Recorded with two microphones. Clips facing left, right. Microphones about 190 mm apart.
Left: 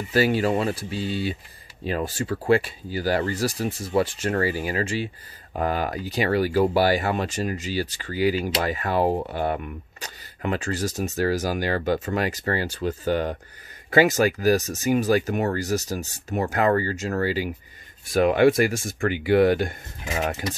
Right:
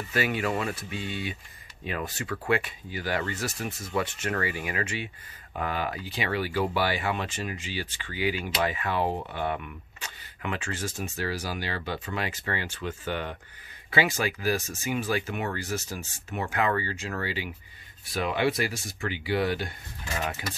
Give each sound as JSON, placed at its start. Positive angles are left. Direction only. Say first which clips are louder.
{"t": 0.1, "sound": "speech", "louder": "left 7 dB", "side_deg": 35}